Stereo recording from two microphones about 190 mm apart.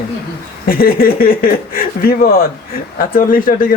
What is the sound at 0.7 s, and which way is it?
Speech, 50° left (ahead or behind).